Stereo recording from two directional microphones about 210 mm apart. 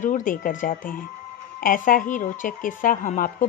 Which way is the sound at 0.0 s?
40° left (ahead or behind).